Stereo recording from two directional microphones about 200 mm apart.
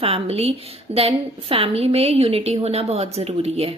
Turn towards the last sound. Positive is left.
turn(degrees=-30)  # may be behind; listen again after turning